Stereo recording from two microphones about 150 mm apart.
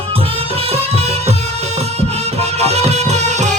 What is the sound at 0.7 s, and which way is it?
Music, 45° right (ahead or behind).